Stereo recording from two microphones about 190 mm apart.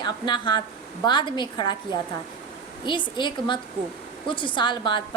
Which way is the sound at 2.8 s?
25° left (ahead or behind).